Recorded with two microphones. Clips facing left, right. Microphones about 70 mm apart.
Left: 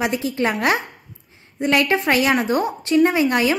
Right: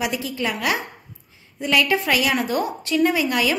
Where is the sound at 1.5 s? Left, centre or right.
Left.